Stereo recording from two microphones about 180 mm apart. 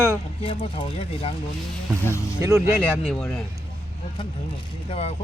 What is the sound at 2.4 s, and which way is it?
Speech, 15° right (ahead or behind).